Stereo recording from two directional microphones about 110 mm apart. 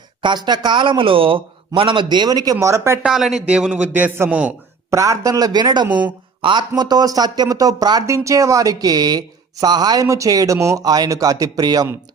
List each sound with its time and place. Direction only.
0.2 s a man's voice: 45° right (ahead or behind); by 3.0 s 25° right (ahead or behind)
3.0 s a man's voice: 5° right (ahead or behind)
4.9 s speech: 30° right (ahead or behind)